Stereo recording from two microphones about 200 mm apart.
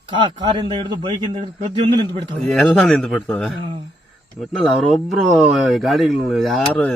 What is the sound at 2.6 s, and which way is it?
Speech, 5° left (ahead or behind).